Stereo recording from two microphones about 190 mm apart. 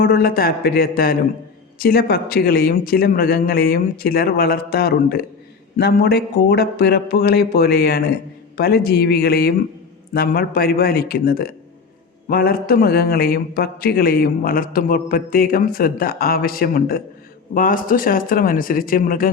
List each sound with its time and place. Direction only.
0.0 s a man's voice: 50° left (ahead or behind)